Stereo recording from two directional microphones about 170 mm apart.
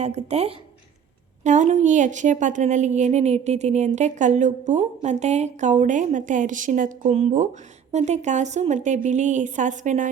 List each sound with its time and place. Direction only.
0.0 s a woman's voice: 40° right (ahead or behind)